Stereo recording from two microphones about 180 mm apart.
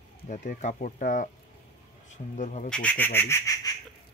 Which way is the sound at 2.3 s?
45° left (ahead or behind).